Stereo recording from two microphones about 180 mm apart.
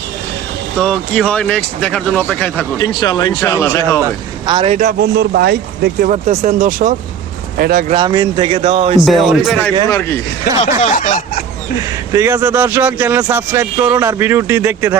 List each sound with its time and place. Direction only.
0.8 s speech: 5° left (ahead or behind)
2.7 s speech: 20° left (ahead or behind)
4.0 s speech: 25° right (ahead or behind)
4.8 s speech: 55° right (ahead or behind)
6.1 s speech: 40° right (ahead or behind)
7.9 s speech: 20° right (ahead or behind)
9.0 s speech: centre (ahead or behind)
9.9 s speech: 15° left (ahead or behind)
10.9 s speech: 45° left (ahead or behind)
12.1 s speech: 15° right (ahead or behind)